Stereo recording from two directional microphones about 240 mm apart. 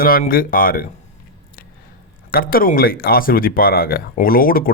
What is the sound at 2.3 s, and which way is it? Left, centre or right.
Speech, left.